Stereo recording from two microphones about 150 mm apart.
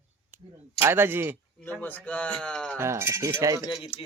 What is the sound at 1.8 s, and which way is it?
Speech, 10° left (ahead or behind).